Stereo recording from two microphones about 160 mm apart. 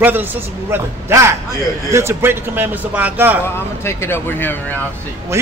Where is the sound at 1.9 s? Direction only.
15° right (ahead or behind).